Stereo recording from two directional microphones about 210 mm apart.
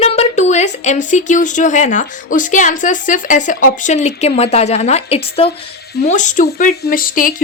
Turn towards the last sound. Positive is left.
turn(degrees=40)  # may be behind; listen again after turning